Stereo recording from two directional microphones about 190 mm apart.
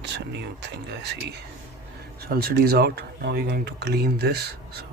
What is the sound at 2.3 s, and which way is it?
Speech, 55° right (ahead or behind).